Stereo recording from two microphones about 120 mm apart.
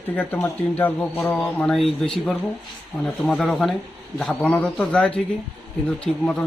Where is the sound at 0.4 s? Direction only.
15° left (ahead or behind).